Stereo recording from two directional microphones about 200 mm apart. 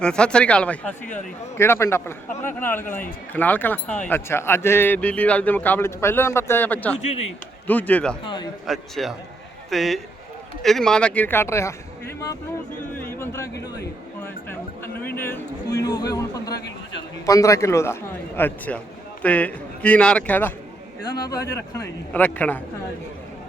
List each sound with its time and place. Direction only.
0.0 s speech: 5° left (ahead or behind)
13.1 s speech: 15° left (ahead or behind)
15.0 s speech: 10° left (ahead or behind)
21.0 s speech: 20° left (ahead or behind)